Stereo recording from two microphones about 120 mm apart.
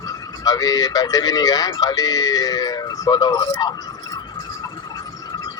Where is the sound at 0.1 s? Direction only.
30° left (ahead or behind).